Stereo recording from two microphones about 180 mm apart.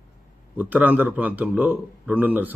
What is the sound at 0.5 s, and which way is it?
A man's voice, 10° right (ahead or behind).